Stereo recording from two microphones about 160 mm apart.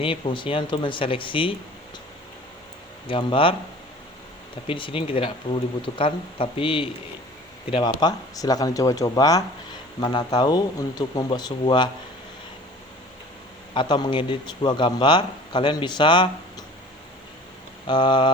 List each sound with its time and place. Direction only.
0.0 s speech: 35° left (ahead or behind)
3.1 s speech: 30° left (ahead or behind)
4.6 s a man's voice: 35° left (ahead or behind)
13.7 s a man's voice: 30° left (ahead or behind)
17.8 s a man's voice: 30° left (ahead or behind)